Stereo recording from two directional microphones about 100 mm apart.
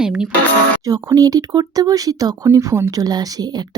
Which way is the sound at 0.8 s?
40° right (ahead or behind).